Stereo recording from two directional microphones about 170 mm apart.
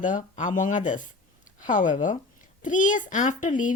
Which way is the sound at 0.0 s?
50° left (ahead or behind).